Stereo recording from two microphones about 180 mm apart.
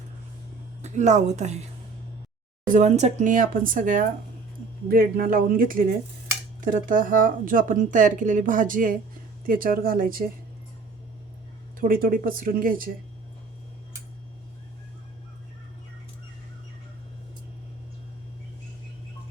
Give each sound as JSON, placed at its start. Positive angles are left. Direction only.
{"t": 0.8, "sound": "speech", "side_deg": -40}
{"t": 2.6, "sound": "speech", "side_deg": -40}
{"t": 11.8, "sound": "speech", "side_deg": -50}